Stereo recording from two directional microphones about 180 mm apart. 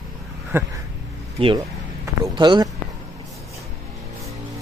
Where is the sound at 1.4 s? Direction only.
25° right (ahead or behind).